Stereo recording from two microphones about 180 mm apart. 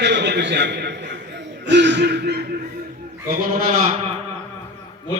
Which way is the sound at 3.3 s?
50° right (ahead or behind).